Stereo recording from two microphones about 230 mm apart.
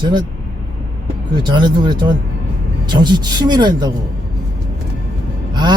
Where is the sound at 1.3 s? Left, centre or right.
Centre.